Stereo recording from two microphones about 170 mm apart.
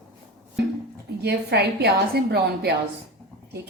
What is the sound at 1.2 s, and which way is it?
A woman's voice, 75° right (ahead or behind).